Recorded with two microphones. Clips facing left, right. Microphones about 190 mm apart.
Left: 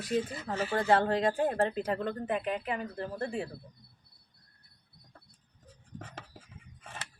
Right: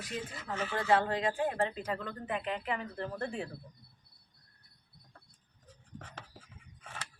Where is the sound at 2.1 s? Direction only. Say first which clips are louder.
Left 5 dB; 30° left (ahead or behind).